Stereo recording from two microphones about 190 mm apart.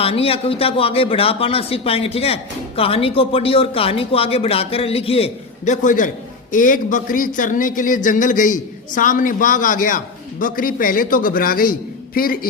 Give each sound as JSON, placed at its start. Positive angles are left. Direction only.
{"t": 0.0, "sound": "a man's voice", "side_deg": 30}